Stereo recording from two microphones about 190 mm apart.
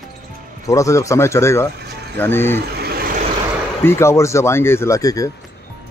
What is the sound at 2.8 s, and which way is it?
Vehicle, 55° right (ahead or behind).